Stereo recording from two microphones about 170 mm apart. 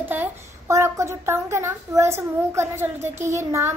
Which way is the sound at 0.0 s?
10° right (ahead or behind).